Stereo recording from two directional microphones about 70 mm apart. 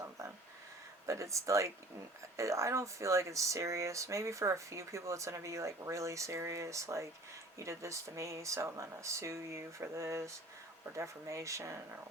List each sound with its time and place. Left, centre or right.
1.0 s speech: right